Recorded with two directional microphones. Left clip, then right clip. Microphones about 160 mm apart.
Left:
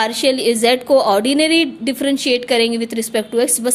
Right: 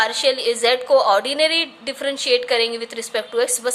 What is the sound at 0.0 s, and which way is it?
A woman's voice, 40° left (ahead or behind).